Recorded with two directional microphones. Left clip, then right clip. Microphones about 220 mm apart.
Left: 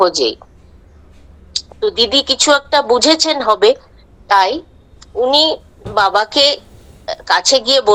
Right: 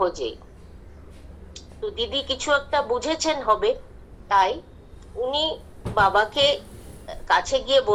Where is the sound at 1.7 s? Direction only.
55° left (ahead or behind).